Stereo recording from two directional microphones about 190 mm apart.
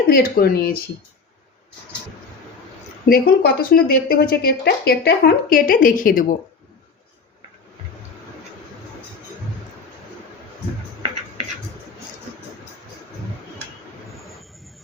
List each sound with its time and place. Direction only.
0.1 s speech: 50° left (ahead or behind)
3.1 s speech: 50° left (ahead or behind)